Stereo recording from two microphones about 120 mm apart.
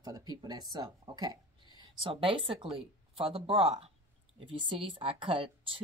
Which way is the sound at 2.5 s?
50° right (ahead or behind).